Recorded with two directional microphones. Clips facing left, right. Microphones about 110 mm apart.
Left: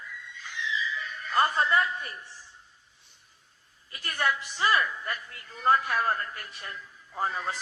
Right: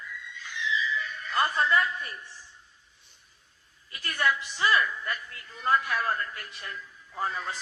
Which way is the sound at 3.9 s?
30° left (ahead or behind).